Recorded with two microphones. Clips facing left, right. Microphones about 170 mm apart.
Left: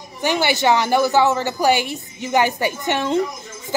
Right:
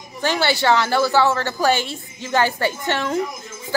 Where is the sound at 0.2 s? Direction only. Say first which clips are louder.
Left 1 dB; 15° left (ahead or behind).